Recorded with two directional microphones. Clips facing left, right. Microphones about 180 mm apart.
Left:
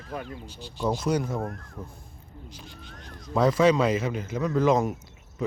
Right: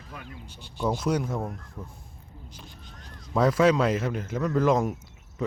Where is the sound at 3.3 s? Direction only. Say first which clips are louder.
Left 1 dB; centre (ahead or behind).